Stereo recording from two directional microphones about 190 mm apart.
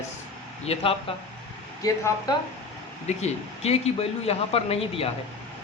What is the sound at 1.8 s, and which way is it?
Speech, 20° left (ahead or behind).